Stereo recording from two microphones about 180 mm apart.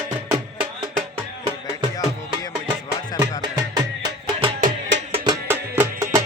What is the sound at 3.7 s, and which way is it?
Music, 25° right (ahead or behind).